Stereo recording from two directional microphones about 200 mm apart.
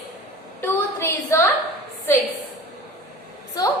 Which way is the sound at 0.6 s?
15° left (ahead or behind).